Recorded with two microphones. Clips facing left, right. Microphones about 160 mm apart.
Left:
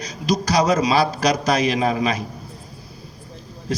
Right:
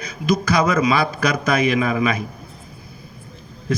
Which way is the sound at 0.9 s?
35° left (ahead or behind).